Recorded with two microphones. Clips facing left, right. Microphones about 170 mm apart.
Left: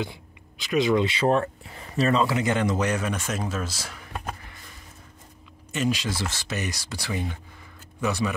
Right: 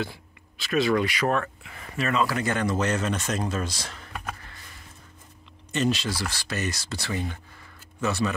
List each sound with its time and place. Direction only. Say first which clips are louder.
0.0 s speech: even; 15° left (ahead or behind); by 2.2 s 35° left (ahead or behind)
2.2 s speech: left 2 dB; 20° left (ahead or behind)
5.7 s speech: right 1 dB; 10° left (ahead or behind)